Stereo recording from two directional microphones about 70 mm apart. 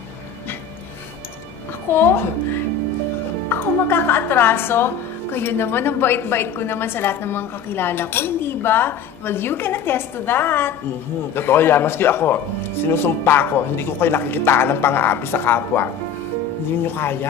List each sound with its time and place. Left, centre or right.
1.9 s a woman's voice: left